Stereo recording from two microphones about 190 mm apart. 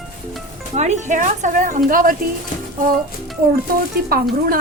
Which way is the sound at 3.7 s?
50° right (ahead or behind).